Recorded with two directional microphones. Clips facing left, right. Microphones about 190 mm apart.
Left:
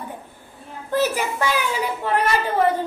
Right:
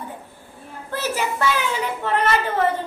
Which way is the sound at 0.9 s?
15° left (ahead or behind).